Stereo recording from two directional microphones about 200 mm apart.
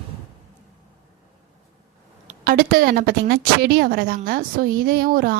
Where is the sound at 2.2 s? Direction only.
45° right (ahead or behind).